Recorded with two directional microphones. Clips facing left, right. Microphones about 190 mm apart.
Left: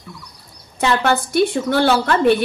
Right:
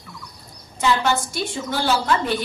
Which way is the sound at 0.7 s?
60° left (ahead or behind).